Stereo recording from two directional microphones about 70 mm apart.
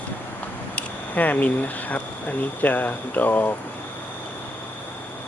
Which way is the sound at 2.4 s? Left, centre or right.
Left.